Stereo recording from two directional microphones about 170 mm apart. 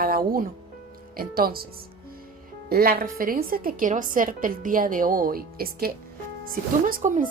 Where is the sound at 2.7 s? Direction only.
60° right (ahead or behind).